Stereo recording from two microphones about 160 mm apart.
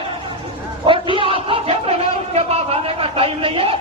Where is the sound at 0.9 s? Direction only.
30° right (ahead or behind).